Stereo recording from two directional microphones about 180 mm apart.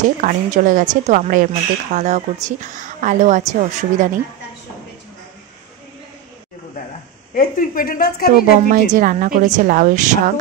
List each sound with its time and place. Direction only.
0.2 s a woman's voice: 45° right (ahead or behind)
7.3 s speech: 50° left (ahead or behind)
8.6 s a woman's voice: 45° right (ahead or behind)